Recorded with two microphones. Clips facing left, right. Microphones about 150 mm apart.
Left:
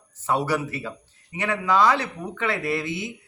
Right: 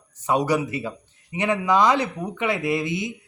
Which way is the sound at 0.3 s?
15° right (ahead or behind).